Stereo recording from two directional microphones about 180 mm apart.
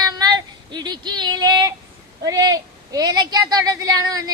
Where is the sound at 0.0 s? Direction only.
20° right (ahead or behind).